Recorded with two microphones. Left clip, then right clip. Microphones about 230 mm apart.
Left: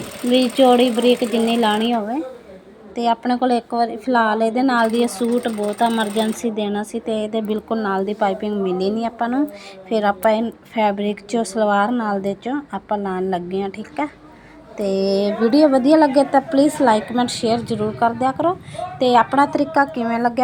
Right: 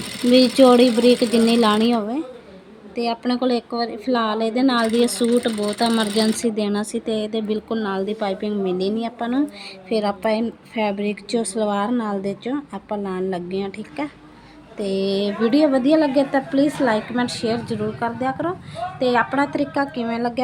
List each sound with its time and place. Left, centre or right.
0.3 s speech: right
3.0 s a woman's voice: centre
14.8 s music: left
15.1 s a woman's voice: centre